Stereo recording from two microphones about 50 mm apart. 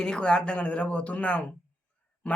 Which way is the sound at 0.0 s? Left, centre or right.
Centre.